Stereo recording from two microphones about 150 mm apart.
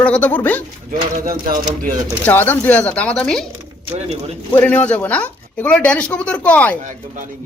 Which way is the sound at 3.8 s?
45° right (ahead or behind).